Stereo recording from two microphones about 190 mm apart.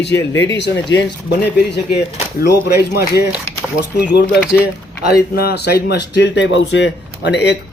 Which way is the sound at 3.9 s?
60° left (ahead or behind).